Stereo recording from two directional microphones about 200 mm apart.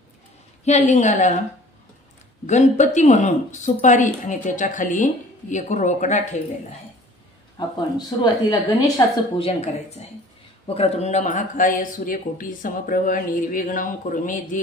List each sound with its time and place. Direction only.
0.7 s speech: 35° left (ahead or behind)
2.4 s speech: 35° left (ahead or behind)
8.2 s a woman's voice: 20° left (ahead or behind)
9.6 s speech: 30° left (ahead or behind)